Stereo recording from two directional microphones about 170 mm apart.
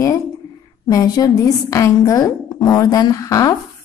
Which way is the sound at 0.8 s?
20° left (ahead or behind).